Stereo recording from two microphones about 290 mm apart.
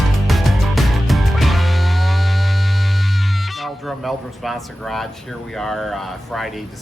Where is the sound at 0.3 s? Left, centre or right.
Centre.